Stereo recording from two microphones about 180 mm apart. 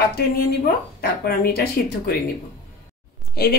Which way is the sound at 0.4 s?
60° left (ahead or behind).